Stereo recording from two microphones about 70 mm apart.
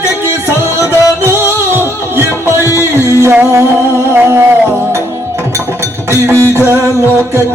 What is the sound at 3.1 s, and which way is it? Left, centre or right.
Music, right.